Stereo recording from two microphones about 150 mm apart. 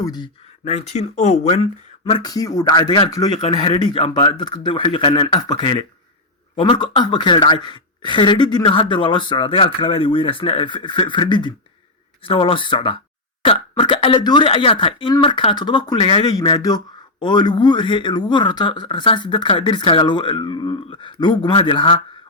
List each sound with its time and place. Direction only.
0.0 s speech: 25° left (ahead or behind)
0.6 s speech: 45° left (ahead or behind)
2.3 s a man's voice: 25° left (ahead or behind)
16.3 s a man's voice: 25° left (ahead or behind)